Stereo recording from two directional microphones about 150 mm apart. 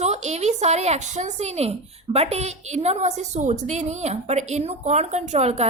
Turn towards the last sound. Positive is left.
turn(degrees=-45)  # may be behind; listen again after turning